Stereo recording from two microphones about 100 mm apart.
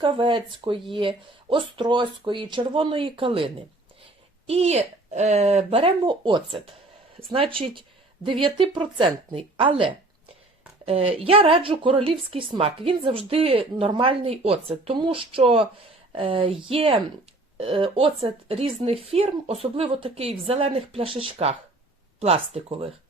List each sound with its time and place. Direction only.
0.0 s speech: 55° right (ahead or behind)
4.4 s speech: 90° right
6.1 s speech: 55° right (ahead or behind)
10.8 s speech: 75° right (ahead or behind)
14.9 s speech: 60° right (ahead or behind); by 19.5 s 85° right
19.7 s speech: 70° right (ahead or behind)